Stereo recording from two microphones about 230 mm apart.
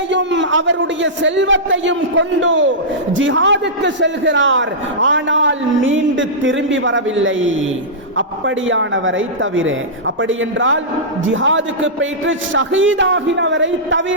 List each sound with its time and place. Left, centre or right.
0.1 s a man's voice: right